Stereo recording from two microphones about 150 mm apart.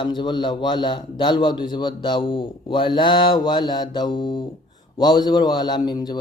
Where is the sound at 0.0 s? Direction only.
30° left (ahead or behind).